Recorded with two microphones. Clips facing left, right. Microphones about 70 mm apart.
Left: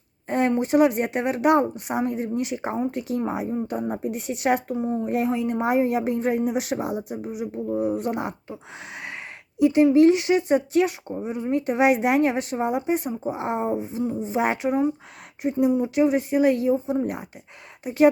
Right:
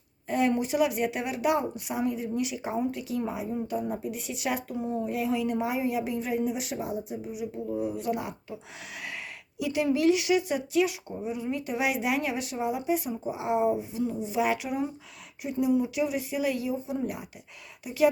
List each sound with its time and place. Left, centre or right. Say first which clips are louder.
0.3 s a sound: left 3 dB; left
0.6 s speech: left 7 dB; left
4.8 s speech: left 5 dB; left
5.0 s speech: left 4 dB; left
5.6 s speech: left 7 dB; left
7.3 s speech: left 7 dB; left
9.6 s speech: left 10 dB; left